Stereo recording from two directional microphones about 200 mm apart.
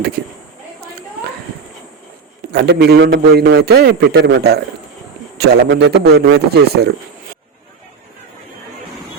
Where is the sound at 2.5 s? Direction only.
55° right (ahead or behind).